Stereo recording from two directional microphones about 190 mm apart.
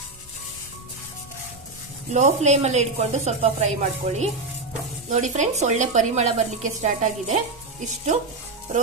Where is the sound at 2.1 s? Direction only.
40° right (ahead or behind).